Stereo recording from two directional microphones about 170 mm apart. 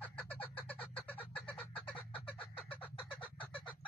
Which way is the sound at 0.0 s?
10° left (ahead or behind).